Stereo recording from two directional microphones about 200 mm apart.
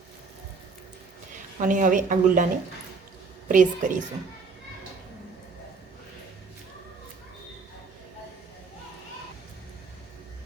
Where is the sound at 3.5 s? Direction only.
40° right (ahead or behind).